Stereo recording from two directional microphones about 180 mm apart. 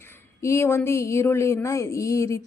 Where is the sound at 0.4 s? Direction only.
15° left (ahead or behind).